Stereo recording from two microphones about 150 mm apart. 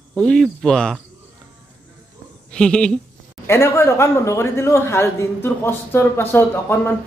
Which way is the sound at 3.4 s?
15° left (ahead or behind).